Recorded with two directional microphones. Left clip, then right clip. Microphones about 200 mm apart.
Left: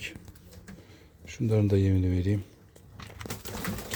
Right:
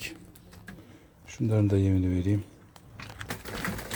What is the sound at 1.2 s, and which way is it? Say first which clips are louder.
Speech: even; 5° left (ahead or behind).